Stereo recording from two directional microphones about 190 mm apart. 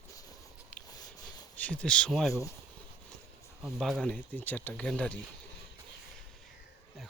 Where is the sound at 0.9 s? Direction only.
20° left (ahead or behind).